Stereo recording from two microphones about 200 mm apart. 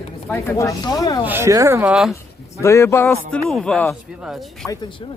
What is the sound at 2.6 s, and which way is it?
Speech, 15° left (ahead or behind).